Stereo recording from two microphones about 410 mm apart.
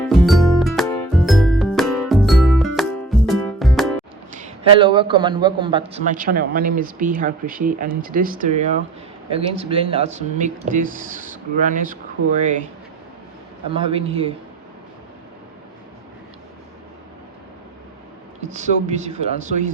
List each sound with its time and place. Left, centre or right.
0.1 s music: centre
4.4 s a man's voice: centre
13.7 s speech: centre
18.5 s speech: centre